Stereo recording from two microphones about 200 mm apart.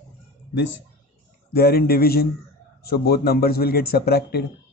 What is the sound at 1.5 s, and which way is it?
A man's voice, 50° left (ahead or behind).